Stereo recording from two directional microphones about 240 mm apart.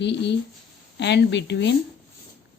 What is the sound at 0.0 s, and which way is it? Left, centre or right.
Speech, left.